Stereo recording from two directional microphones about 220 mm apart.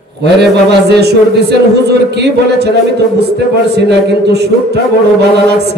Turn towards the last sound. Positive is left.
turn(degrees=-50)  # may be behind; listen again after turning